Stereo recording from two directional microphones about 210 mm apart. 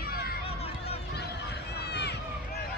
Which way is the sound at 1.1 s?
50° left (ahead or behind).